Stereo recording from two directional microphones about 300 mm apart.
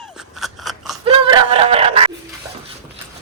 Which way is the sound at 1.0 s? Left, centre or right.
Centre.